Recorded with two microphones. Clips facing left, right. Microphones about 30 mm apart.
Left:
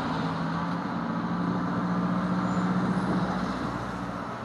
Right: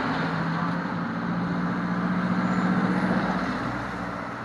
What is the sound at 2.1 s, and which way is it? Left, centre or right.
Vehicle, right.